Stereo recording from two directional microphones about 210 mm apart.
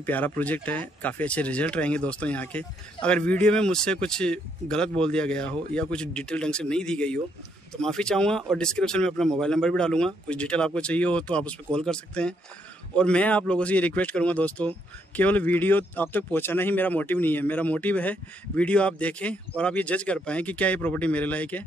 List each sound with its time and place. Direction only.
0.0 s speech: 10° left (ahead or behind)